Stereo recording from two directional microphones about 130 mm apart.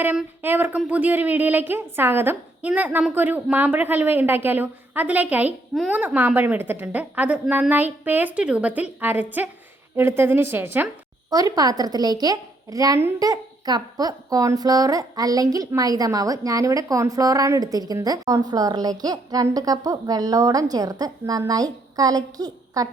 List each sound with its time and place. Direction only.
0.0 s a woman's voice: 15° right (ahead or behind)
11.3 s a woman's voice: 30° right (ahead or behind)